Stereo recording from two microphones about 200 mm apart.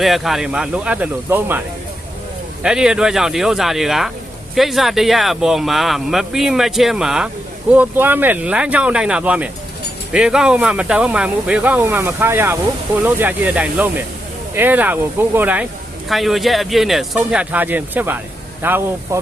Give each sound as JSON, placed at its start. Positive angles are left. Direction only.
{"t": 0.0, "sound": "speech", "side_deg": 0}
{"t": 2.6, "sound": "speech", "side_deg": -5}